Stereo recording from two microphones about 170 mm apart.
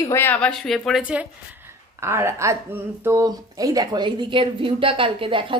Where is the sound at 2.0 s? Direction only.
15° right (ahead or behind).